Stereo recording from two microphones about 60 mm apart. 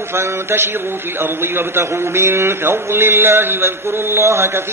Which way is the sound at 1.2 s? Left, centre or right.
Right.